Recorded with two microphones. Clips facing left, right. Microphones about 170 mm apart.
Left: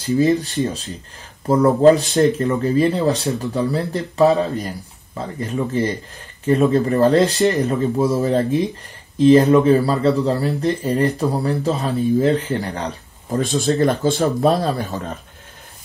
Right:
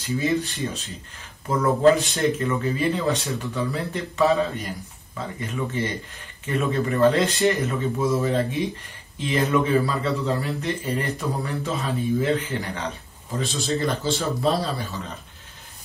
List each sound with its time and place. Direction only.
0.0 s speech: 35° left (ahead or behind)